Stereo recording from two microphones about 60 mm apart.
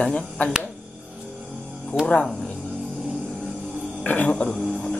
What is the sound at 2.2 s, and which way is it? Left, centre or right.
Cricket, centre.